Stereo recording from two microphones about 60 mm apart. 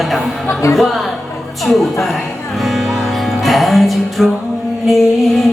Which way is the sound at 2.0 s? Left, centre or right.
Centre.